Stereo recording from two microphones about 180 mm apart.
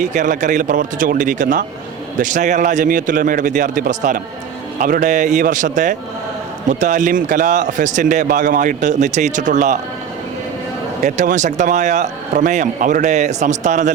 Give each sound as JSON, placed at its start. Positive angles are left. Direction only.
{"t": 0.0, "sound": "speech", "side_deg": -45}
{"t": 11.0, "sound": "a man's voice", "side_deg": -40}